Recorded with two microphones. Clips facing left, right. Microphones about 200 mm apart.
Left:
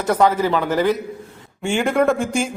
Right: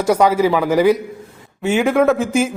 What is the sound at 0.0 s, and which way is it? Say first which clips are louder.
A man's voice: right 3 dB; 10° right (ahead or behind).